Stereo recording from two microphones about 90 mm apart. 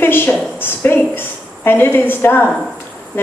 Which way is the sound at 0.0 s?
25° left (ahead or behind).